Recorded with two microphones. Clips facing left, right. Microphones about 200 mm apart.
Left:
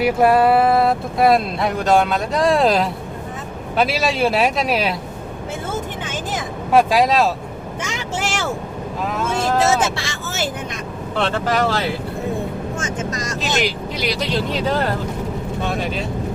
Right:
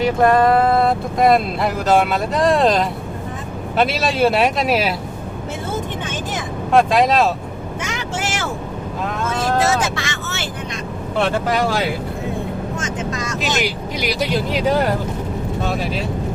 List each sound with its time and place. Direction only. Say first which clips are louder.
0.0 s speech: even; 10° left (ahead or behind)
6.7 s speech: even; 5° left (ahead or behind)
9.6 s vehicle: left 2 dB; 30° left (ahead or behind)
11.2 s speech: right 1 dB; 10° right (ahead or behind)
13.9 s speech: right 4 dB; 10° right (ahead or behind)